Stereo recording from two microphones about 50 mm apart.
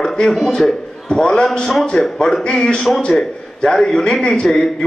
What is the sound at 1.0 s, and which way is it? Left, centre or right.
A man's voice, centre.